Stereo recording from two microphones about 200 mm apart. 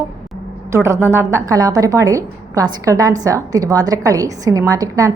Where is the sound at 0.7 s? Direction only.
15° right (ahead or behind).